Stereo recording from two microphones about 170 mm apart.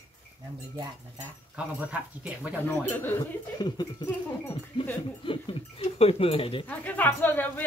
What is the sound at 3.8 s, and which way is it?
Speech, 25° left (ahead or behind).